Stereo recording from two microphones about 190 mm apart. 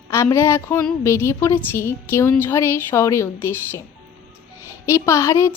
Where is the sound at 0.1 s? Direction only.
15° left (ahead or behind).